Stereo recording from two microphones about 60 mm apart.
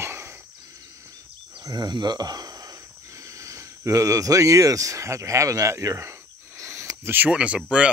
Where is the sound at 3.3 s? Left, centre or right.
Right.